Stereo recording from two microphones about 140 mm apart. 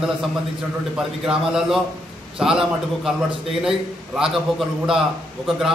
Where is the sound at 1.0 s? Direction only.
5° right (ahead or behind).